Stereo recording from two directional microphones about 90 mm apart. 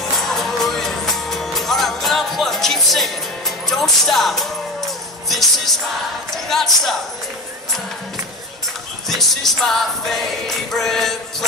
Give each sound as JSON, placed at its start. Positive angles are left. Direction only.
{"t": 0.3, "sound": "music", "side_deg": 5}
{"t": 9.1, "sound": "music", "side_deg": 0}